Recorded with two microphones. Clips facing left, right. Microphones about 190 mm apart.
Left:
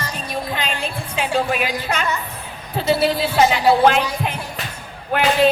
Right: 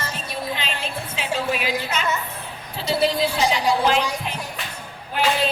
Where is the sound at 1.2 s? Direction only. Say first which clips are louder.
Left 5 dB; 50° left (ahead or behind).